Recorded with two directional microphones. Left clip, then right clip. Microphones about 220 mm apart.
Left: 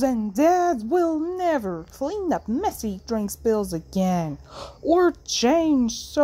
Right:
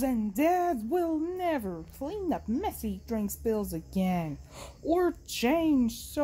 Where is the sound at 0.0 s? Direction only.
15° left (ahead or behind).